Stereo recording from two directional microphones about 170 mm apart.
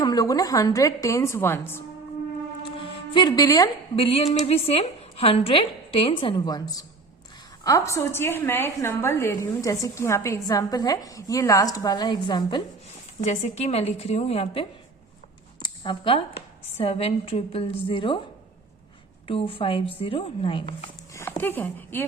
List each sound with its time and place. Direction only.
0.0 s a woman's voice: 20° left (ahead or behind)
2.6 s music: 30° left (ahead or behind)
3.9 s a woman's voice: 35° left (ahead or behind)
13.2 s a woman's voice: 40° left (ahead or behind)
19.3 s a woman's voice: 35° left (ahead or behind)
21.1 s speech: 15° left (ahead or behind)